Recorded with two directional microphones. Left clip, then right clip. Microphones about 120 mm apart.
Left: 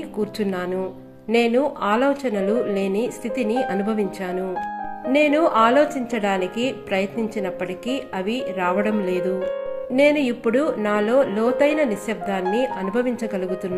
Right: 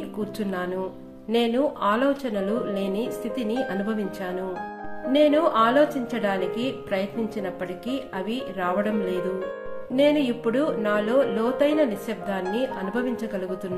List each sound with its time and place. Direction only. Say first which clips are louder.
1.3 s a woman's voice: left 4 dB; 35° left (ahead or behind)